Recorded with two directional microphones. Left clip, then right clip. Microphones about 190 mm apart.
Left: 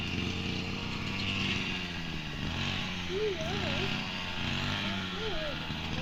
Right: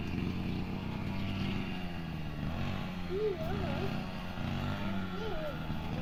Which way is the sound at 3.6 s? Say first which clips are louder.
Left 7 dB; 50° right (ahead or behind).